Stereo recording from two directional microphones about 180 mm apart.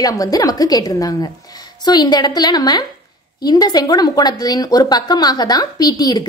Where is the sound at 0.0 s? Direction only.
20° left (ahead or behind).